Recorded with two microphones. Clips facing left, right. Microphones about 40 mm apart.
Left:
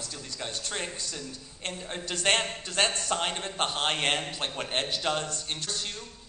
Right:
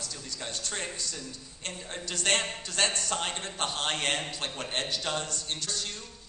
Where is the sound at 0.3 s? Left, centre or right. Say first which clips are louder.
Left 2 dB; left.